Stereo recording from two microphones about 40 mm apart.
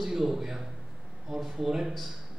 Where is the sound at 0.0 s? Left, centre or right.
Centre.